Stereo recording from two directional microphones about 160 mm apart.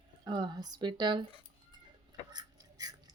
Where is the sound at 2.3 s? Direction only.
25° right (ahead or behind).